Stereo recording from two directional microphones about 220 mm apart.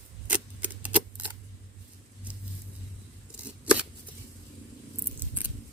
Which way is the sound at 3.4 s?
5° right (ahead or behind).